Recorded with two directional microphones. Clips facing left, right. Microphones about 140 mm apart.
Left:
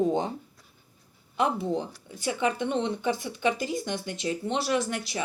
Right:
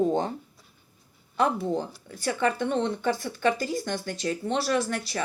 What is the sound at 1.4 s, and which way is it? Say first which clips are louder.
Speech: right 1 dB; 15° left (ahead or behind).